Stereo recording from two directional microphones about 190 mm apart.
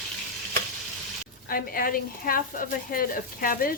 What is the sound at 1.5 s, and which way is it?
A woman's voice, 50° left (ahead or behind).